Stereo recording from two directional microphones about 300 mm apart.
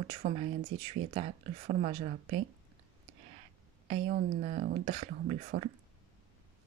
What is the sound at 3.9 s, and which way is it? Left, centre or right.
Speech, right.